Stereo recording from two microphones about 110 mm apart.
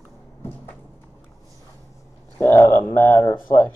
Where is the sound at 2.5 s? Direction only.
20° left (ahead or behind).